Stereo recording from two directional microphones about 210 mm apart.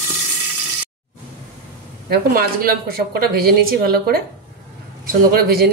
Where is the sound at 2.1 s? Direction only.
45° right (ahead or behind).